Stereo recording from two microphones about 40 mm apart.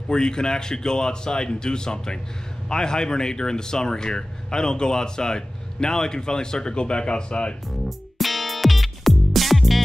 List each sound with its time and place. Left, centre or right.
0.1 s speech: centre
8.2 s music: centre